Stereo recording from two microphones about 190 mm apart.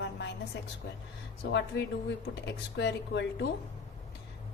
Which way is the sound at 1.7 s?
60° left (ahead or behind).